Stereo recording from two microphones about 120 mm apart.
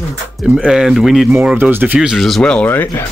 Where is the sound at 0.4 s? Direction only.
5° right (ahead or behind).